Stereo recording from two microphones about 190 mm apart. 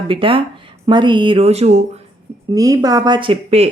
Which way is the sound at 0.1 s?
30° right (ahead or behind).